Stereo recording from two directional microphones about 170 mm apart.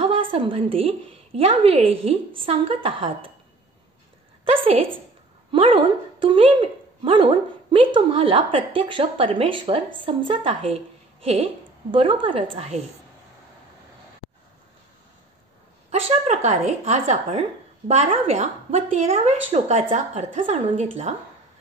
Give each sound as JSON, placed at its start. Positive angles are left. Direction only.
{"t": 0.0, "sound": "a woman's voice", "side_deg": -30}
{"t": 4.5, "sound": "a woman's voice", "side_deg": -35}
{"t": 15.9, "sound": "a woman's voice", "side_deg": -40}